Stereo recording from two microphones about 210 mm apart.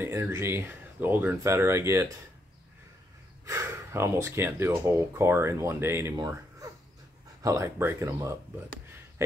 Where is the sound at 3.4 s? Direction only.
15° right (ahead or behind).